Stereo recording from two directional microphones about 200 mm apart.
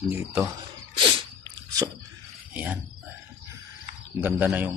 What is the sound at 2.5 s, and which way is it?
Speech, 10° right (ahead or behind).